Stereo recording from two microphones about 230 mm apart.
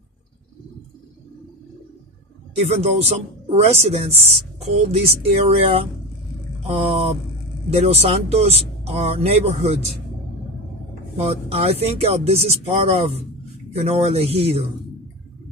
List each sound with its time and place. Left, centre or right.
2.5 s a woman's voice: right
11.1 s a woman's voice: right